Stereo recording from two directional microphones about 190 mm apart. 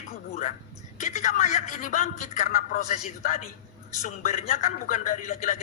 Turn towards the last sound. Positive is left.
turn(degrees=45)  # may be behind; listen again after turning